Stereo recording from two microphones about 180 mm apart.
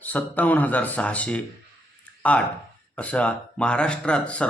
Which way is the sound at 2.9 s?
5° left (ahead or behind).